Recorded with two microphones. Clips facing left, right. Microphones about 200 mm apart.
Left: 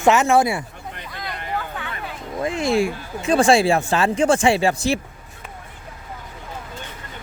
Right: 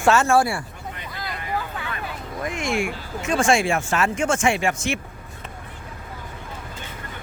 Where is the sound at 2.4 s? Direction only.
35° left (ahead or behind).